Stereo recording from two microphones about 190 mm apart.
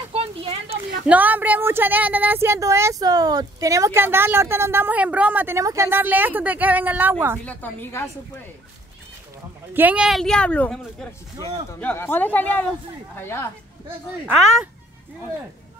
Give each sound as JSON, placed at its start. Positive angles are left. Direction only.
{"t": 0.1, "sound": "a sound", "side_deg": -30}
{"t": 1.0, "sound": "speech", "side_deg": -10}
{"t": 7.4, "sound": "speech", "side_deg": 10}
{"t": 9.8, "sound": "a woman's voice", "side_deg": -5}